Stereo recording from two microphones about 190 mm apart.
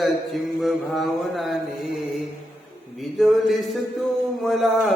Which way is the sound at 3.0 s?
Centre (ahead or behind).